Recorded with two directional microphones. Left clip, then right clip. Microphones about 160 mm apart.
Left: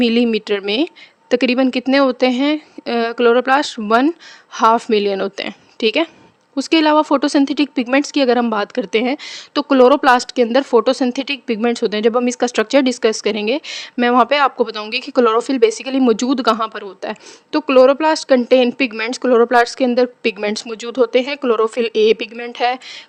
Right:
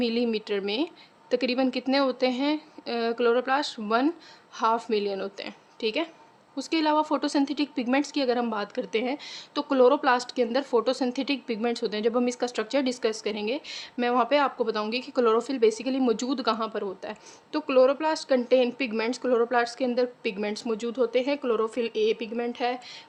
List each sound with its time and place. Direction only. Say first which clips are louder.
0.0 s a woman's voice: left 11 dB; 50° left (ahead or behind)